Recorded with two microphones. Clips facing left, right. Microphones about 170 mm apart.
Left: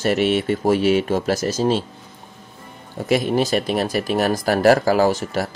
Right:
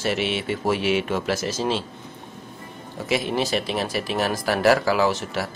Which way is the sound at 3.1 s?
45° left (ahead or behind).